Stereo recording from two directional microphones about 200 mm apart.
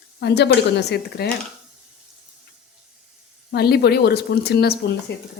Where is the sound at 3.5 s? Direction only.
55° left (ahead or behind).